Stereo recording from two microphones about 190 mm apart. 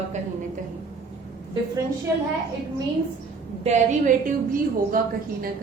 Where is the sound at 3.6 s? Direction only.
40° right (ahead or behind).